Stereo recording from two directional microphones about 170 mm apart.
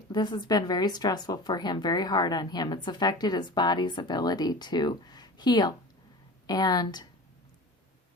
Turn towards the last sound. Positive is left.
turn(degrees=25)  # may be behind; listen again after turning